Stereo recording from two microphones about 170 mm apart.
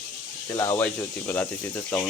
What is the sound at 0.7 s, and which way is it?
Speech, 10° left (ahead or behind).